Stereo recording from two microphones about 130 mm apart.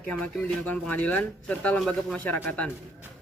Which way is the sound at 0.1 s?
10° left (ahead or behind).